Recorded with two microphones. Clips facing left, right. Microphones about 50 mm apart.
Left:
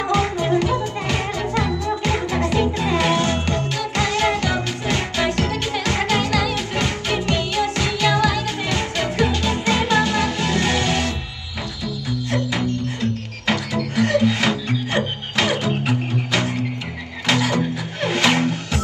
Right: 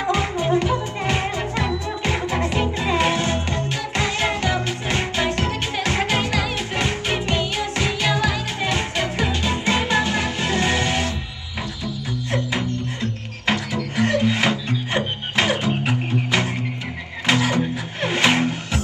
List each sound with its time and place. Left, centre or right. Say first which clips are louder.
0.1 s music: left 1 dB; right
12.3 s music: left 2 dB; right